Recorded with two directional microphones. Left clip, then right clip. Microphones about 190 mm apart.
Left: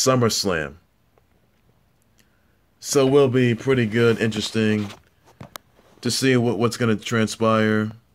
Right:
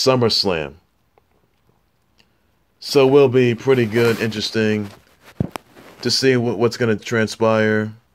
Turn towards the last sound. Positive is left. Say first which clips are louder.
# right 3 dB
turn(degrees=5)  # may be behind; listen again after turning